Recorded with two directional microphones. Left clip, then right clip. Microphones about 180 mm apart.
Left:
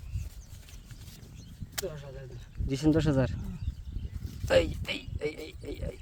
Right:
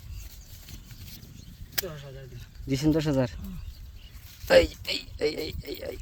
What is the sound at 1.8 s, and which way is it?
Speech, 35° left (ahead or behind).